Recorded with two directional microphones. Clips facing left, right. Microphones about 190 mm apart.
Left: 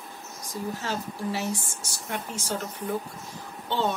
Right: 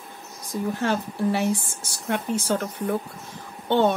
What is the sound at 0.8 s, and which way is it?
Speech, 60° right (ahead or behind).